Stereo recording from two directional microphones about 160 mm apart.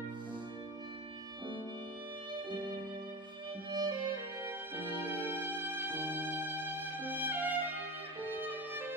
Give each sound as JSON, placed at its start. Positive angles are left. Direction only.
{"t": 3.7, "sound": "music", "side_deg": -30}
{"t": 4.4, "sound": "music", "side_deg": -15}